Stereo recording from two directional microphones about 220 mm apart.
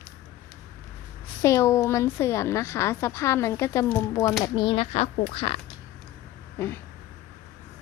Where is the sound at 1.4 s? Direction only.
10° left (ahead or behind).